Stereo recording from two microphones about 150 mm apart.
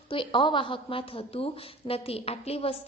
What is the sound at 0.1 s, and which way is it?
A woman's voice, 35° left (ahead or behind).